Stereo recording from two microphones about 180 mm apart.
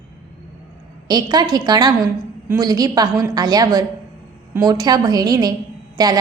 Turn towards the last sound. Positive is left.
turn(degrees=-20)  # may be behind; listen again after turning